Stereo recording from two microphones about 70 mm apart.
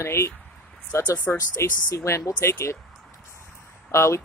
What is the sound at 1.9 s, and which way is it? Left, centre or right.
Speech, left.